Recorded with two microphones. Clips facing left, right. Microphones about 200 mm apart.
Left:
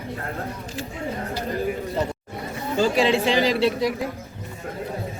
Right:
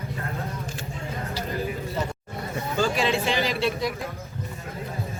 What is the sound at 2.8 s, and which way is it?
Speech, 30° left (ahead or behind).